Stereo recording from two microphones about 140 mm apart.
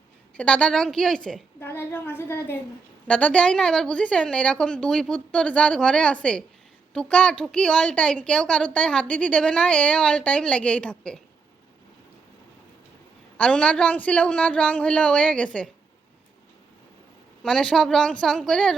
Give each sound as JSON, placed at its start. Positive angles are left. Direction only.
{"t": 0.3, "sound": "a woman's voice", "side_deg": 10}
{"t": 1.5, "sound": "a woman's voice", "side_deg": 15}
{"t": 13.3, "sound": "a woman's voice", "side_deg": 10}
{"t": 17.4, "sound": "a woman's voice", "side_deg": 5}